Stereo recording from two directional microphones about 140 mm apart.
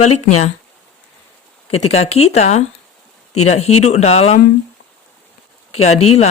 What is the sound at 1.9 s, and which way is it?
Speech, 50° left (ahead or behind).